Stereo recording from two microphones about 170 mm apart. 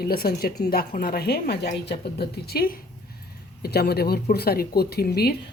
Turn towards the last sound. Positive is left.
turn(degrees=65)  # may be behind; listen again after turning